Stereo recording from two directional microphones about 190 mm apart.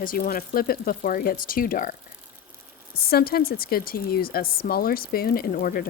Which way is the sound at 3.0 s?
55° left (ahead or behind).